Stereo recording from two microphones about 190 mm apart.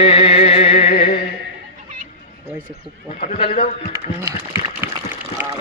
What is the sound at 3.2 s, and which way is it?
Speech, 35° left (ahead or behind).